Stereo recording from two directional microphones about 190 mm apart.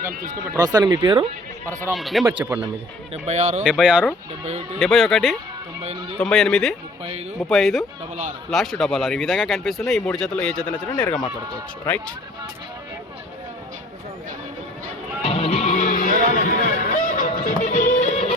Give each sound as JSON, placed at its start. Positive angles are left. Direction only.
{"t": 0.1, "sound": "speech", "side_deg": -45}
{"t": 0.5, "sound": "speech", "side_deg": -20}
{"t": 1.9, "sound": "speech", "side_deg": 0}
{"t": 2.2, "sound": "speech", "side_deg": -15}
{"t": 3.2, "sound": "speech", "side_deg": -40}
{"t": 4.8, "sound": "speech", "side_deg": 0}
{"t": 5.8, "sound": "speech", "side_deg": -30}
{"t": 6.1, "sound": "speech", "side_deg": 0}
{"t": 15.2, "sound": "music", "side_deg": 30}